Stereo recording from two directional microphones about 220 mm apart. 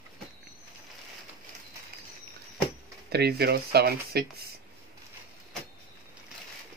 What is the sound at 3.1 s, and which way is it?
Speech, 45° right (ahead or behind).